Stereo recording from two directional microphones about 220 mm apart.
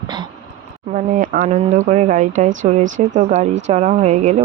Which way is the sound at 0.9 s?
35° right (ahead or behind).